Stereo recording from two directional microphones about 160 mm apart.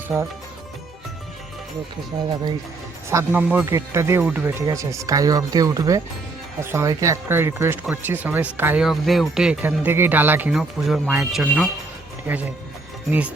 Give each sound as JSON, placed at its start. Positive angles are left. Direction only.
{"t": 3.1, "sound": "speech", "side_deg": -15}
{"t": 13.1, "sound": "speech", "side_deg": -10}